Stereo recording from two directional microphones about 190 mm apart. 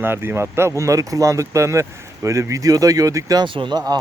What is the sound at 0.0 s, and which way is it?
Speech, 10° right (ahead or behind).